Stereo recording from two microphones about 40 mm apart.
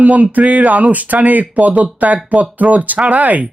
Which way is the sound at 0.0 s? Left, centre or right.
Right.